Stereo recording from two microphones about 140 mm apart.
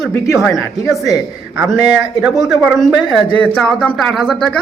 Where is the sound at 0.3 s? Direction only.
Centre (ahead or behind).